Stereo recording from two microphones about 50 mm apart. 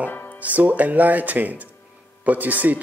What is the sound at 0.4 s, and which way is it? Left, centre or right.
Speech, right.